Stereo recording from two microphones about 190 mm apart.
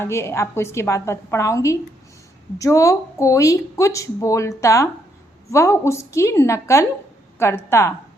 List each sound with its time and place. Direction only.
0.0 s speech: 15° left (ahead or behind)